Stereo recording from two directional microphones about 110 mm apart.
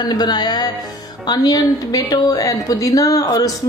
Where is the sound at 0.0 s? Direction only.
40° left (ahead or behind).